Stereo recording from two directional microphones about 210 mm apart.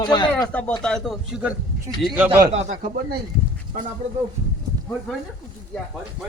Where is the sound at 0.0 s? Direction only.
20° left (ahead or behind).